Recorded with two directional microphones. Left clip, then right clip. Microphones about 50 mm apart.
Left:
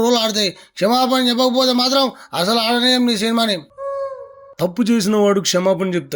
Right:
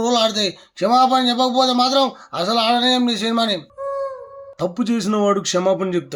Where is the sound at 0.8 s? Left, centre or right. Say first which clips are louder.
Right 1 dB; left.